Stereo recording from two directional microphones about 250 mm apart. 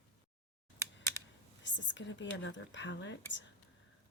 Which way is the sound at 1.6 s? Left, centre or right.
Left.